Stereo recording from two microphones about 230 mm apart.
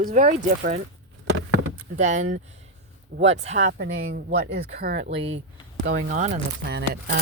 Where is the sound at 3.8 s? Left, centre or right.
Right.